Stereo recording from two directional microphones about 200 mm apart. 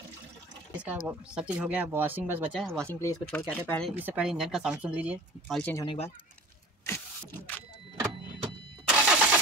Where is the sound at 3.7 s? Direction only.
5° left (ahead or behind).